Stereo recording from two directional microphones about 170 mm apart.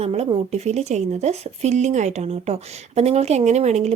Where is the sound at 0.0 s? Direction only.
35° right (ahead or behind).